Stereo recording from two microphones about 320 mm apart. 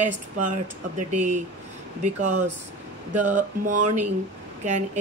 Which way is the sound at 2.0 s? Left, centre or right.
Right.